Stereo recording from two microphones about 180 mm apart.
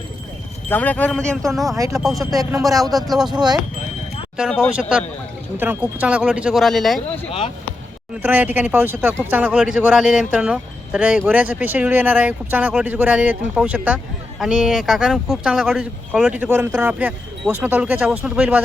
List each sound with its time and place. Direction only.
0.7 s speech: 10° left (ahead or behind)
2.3 s speech: 20° right (ahead or behind)
2.6 s speech: centre (ahead or behind)
7.3 s speech: 30° left (ahead or behind)
8.2 s speech: 10° right (ahead or behind)